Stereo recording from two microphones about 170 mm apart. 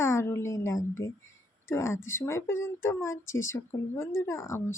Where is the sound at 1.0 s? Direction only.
15° left (ahead or behind).